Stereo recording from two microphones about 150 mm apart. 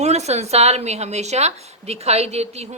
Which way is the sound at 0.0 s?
45° right (ahead or behind).